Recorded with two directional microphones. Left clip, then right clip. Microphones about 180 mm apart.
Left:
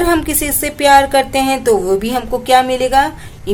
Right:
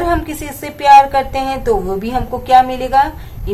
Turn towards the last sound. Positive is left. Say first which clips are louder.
# left 3 dB
turn(degrees=35)  # may be behind; listen again after turning